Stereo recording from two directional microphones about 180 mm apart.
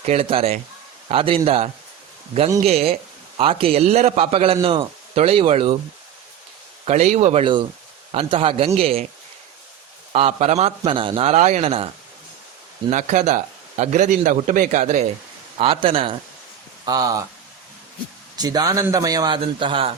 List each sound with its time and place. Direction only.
0.0 s a man's voice: 35° right (ahead or behind)
6.8 s a man's voice: 35° right (ahead or behind)
10.1 s a man's voice: 35° right (ahead or behind)
12.9 s a man's voice: 40° right (ahead or behind)
15.5 s a man's voice: 30° right (ahead or behind)
18.3 s speech: 20° right (ahead or behind)